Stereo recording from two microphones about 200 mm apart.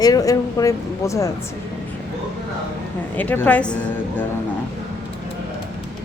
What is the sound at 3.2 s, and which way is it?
Speech, 10° left (ahead or behind).